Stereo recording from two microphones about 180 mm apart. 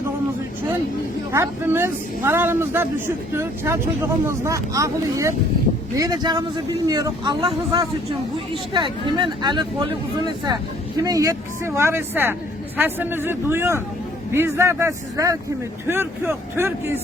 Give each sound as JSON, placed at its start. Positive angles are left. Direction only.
{"t": 1.3, "sound": "speech", "side_deg": -15}